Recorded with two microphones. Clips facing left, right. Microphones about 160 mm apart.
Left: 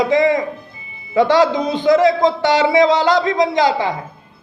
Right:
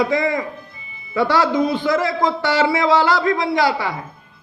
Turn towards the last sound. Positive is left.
turn(degrees=20)  # may be behind; listen again after turning